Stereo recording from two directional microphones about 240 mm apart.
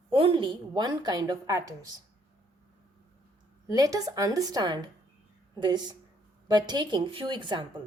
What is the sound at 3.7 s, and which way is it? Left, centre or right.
A woman's voice, centre.